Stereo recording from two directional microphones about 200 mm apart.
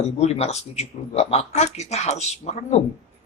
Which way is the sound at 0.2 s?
30° left (ahead or behind).